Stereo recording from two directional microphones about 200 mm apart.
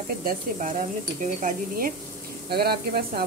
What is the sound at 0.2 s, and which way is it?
Speech, 45° right (ahead or behind).